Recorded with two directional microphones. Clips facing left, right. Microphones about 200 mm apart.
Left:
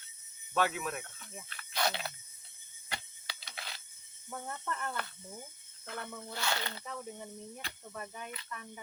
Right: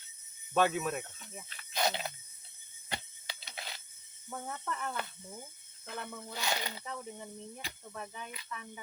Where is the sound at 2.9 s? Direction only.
20° right (ahead or behind).